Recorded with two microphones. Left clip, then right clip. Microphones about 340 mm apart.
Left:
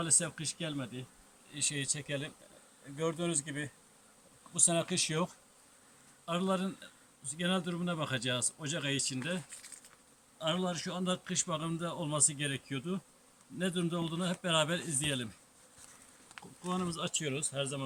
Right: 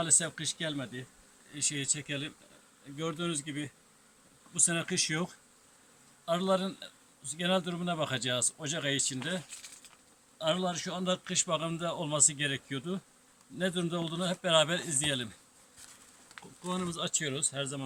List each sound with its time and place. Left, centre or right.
0.0 s a man's voice: centre
1.5 s a man's voice: centre
16.3 s a man's voice: centre